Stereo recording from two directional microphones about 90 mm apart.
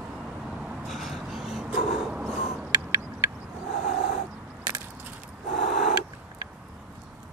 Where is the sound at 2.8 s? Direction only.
35° right (ahead or behind).